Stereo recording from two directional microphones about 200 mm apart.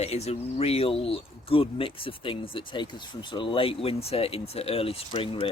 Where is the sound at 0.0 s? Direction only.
30° left (ahead or behind).